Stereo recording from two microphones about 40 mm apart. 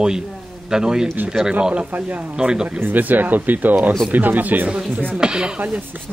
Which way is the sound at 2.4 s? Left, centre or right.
Centre.